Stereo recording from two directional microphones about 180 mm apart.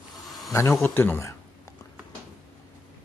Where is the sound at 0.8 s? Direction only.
10° left (ahead or behind).